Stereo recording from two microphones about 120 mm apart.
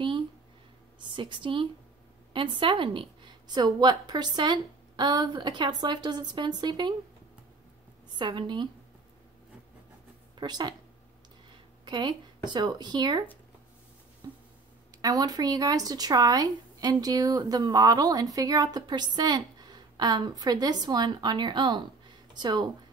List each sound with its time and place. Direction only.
0.9 s a woman's voice: 40° right (ahead or behind)
8.2 s speech: 40° right (ahead or behind)
10.3 s speech: 35° right (ahead or behind)
11.8 s speech: 40° right (ahead or behind)
14.2 s a sound: 35° right (ahead or behind)
15.0 s speech: 30° right (ahead or behind)